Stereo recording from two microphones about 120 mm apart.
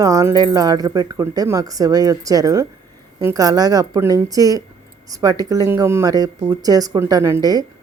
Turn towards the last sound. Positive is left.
turn(degrees=-30)  # may be behind; listen again after turning